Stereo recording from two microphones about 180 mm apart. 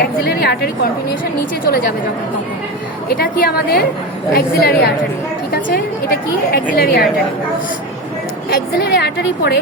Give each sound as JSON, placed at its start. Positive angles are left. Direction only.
{"t": 0.0, "sound": "a woman's voice", "side_deg": 60}
{"t": 3.1, "sound": "a woman's voice", "side_deg": 60}
{"t": 8.4, "sound": "a woman's voice", "side_deg": 60}